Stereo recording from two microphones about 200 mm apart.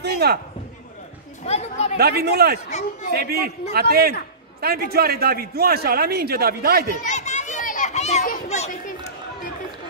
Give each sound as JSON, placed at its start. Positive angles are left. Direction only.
{"t": 0.0, "sound": "speech", "side_deg": -55}
{"t": 1.4, "sound": "speech", "side_deg": 30}
{"t": 2.0, "sound": "a man's voice", "side_deg": -50}
{"t": 7.0, "sound": "children playing", "side_deg": 35}